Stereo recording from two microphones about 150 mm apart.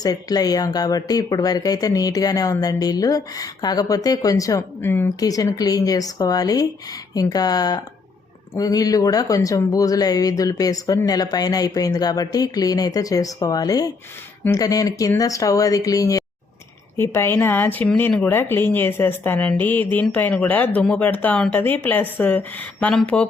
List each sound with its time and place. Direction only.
0.0 s speech: 25° left (ahead or behind); by 23.2 s 5° left (ahead or behind)